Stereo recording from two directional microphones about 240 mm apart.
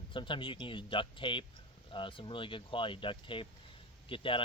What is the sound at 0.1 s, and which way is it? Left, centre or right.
Speech, left.